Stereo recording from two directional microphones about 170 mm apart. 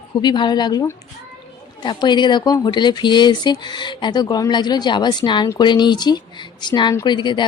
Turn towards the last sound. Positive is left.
turn(degrees=25)  # may be behind; listen again after turning